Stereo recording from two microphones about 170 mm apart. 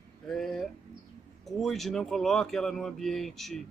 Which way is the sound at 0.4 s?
Centre (ahead or behind).